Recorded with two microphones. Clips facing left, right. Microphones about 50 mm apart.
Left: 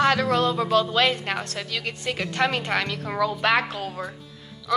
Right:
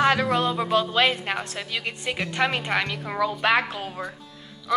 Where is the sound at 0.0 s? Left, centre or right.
Centre.